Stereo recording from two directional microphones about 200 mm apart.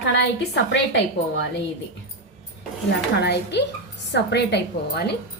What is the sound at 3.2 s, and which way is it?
A woman's voice, 55° left (ahead or behind).